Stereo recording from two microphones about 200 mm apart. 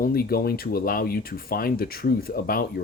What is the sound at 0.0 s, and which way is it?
Speech, 50° left (ahead or behind).